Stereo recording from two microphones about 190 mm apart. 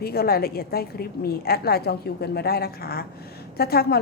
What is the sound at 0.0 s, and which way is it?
A woman's voice, 55° left (ahead or behind).